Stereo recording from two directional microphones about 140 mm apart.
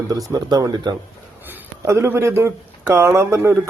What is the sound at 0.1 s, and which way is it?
Speech, 25° right (ahead or behind).